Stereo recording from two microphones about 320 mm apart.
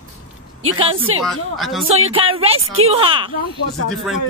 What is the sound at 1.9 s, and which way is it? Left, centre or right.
Speech, centre.